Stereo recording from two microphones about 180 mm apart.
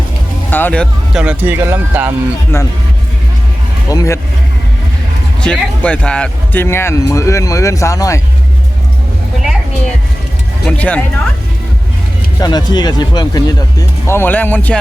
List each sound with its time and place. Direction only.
0.5 s speech: 10° left (ahead or behind)
1.1 s speech: 5° right (ahead or behind)
3.8 s speech: 20° left (ahead or behind)
5.4 s speech: 5° left (ahead or behind)
10.7 s speech: 10° left (ahead or behind)
12.4 s speech: 25° left (ahead or behind)